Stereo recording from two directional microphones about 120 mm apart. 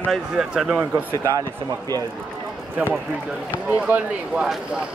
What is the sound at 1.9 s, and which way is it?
Speech, 35° right (ahead or behind).